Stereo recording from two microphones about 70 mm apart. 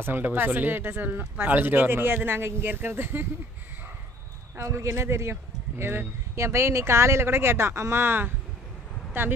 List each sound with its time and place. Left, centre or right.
0.0 s speech: right
4.6 s speech: right